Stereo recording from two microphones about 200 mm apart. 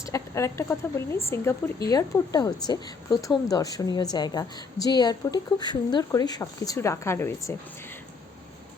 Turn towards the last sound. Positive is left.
turn(degrees=10)  # may be behind; listen again after turning